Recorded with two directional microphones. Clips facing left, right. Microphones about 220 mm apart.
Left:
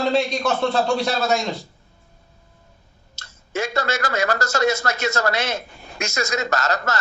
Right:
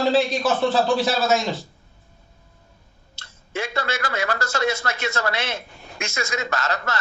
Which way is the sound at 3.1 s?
45° left (ahead or behind).